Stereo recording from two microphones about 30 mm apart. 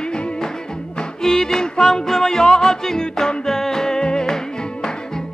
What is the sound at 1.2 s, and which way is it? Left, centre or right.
Music, centre.